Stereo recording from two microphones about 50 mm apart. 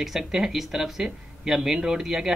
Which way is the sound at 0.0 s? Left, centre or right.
Centre.